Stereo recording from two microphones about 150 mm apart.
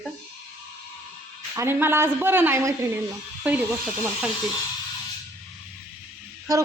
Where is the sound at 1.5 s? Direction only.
15° right (ahead or behind).